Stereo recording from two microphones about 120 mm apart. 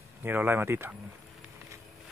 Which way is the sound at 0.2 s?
15° right (ahead or behind).